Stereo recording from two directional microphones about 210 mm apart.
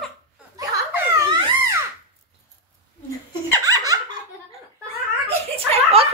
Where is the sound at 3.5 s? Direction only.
15° right (ahead or behind).